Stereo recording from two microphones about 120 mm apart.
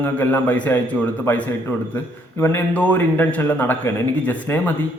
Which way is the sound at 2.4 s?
15° left (ahead or behind).